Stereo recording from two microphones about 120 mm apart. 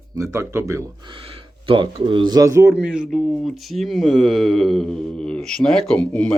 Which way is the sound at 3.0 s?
5° left (ahead or behind).